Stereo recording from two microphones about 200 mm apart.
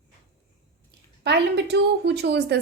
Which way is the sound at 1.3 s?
55° right (ahead or behind).